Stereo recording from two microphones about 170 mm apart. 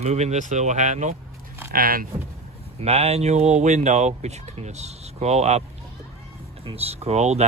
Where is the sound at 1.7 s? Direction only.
60° right (ahead or behind).